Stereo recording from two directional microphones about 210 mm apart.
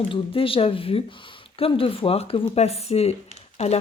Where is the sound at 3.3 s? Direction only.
30° left (ahead or behind).